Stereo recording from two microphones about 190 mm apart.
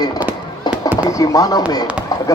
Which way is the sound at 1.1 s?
20° left (ahead or behind).